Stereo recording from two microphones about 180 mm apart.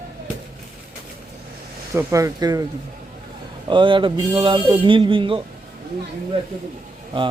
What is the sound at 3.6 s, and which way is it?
Speech, 25° right (ahead or behind).